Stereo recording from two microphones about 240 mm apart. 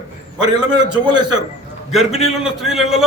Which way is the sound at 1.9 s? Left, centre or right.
Centre.